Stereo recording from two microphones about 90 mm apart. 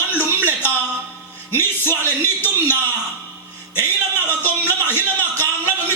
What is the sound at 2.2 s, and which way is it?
Speech, 25° left (ahead or behind).